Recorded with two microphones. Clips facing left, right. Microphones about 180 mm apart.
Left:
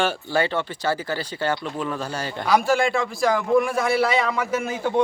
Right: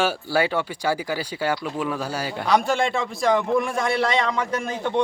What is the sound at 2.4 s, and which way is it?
Speech, 5° left (ahead or behind).